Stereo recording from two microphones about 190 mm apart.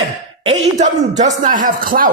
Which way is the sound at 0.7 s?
40° right (ahead or behind).